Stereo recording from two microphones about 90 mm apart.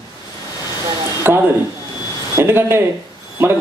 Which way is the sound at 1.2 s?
25° right (ahead or behind).